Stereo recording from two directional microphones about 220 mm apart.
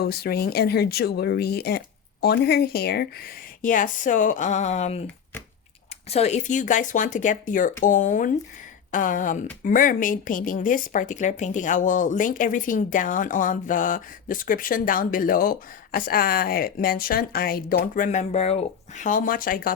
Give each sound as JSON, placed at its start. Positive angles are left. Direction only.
{"t": 0.0, "sound": "speech", "side_deg": 45}
{"t": 6.1, "sound": "speech", "side_deg": 30}